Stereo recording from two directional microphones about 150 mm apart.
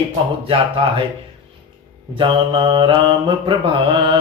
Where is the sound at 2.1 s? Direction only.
35° right (ahead or behind).